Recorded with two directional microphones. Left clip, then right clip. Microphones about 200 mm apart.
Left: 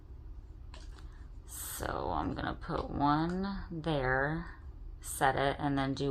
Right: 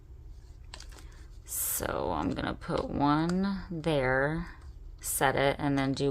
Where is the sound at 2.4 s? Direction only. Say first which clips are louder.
Right 4 dB; 40° right (ahead or behind).